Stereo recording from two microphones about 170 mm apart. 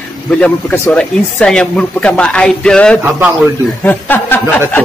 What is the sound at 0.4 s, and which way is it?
Speech, 5° left (ahead or behind).